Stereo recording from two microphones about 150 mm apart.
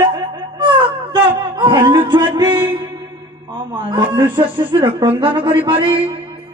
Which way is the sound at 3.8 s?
35° right (ahead or behind).